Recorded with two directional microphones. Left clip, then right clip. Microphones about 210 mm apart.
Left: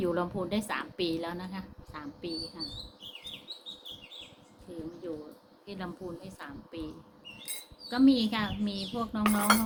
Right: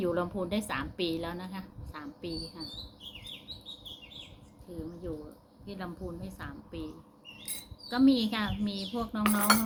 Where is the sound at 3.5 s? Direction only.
40° right (ahead or behind).